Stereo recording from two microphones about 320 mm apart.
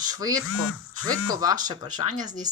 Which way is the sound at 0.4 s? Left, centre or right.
Left.